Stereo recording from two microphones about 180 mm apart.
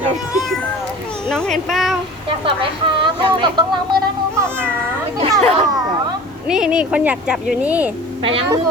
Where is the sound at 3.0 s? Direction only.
25° right (ahead or behind).